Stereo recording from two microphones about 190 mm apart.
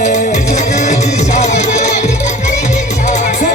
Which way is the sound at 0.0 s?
40° left (ahead or behind).